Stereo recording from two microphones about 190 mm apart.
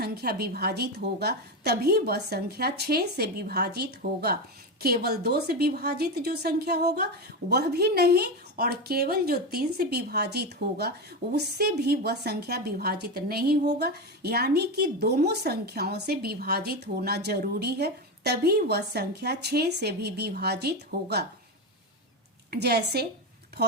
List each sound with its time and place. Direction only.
0.0 s a woman's voice: 55° right (ahead or behind)
22.4 s a woman's voice: 60° right (ahead or behind)